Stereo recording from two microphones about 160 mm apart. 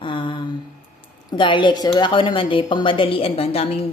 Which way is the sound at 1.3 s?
30° left (ahead or behind).